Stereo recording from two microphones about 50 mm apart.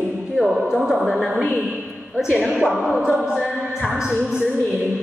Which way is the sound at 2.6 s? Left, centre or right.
Centre.